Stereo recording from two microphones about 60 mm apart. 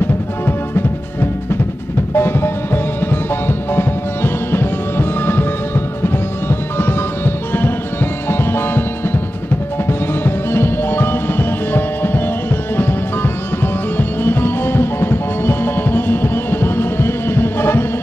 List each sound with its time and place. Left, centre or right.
0.5 s music: left
6.8 s music: left
9.8 s music: left